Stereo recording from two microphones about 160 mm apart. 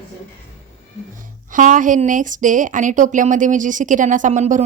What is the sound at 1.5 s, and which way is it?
A woman's voice, 55° right (ahead or behind).